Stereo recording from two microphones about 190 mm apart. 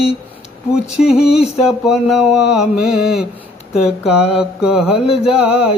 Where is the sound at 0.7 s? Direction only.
5° right (ahead or behind).